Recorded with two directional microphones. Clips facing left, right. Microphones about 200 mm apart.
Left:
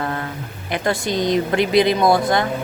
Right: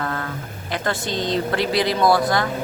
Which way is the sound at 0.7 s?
20° left (ahead or behind).